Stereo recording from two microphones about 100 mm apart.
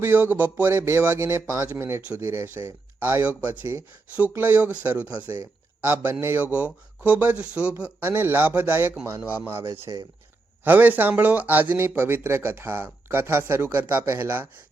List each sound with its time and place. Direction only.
0.0 s speech: 20° right (ahead or behind)
9.9 s speech: 40° right (ahead or behind)
10.6 s speech: 20° right (ahead or behind)